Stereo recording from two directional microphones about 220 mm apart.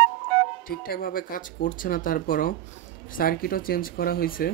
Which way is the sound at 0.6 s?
40° left (ahead or behind).